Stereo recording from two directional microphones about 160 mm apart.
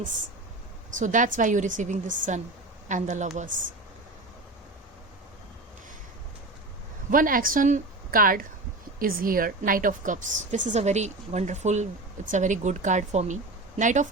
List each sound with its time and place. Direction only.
0.9 s a woman's voice: 50° right (ahead or behind)
7.1 s a woman's voice: 60° right (ahead or behind)